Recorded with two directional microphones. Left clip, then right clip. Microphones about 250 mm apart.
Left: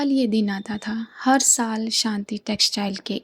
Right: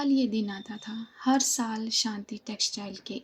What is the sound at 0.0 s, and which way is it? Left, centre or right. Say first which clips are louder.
A woman's voice: left 6 dB; left.